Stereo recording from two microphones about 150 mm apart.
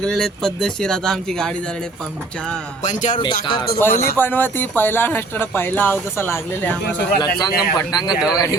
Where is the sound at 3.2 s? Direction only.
30° left (ahead or behind).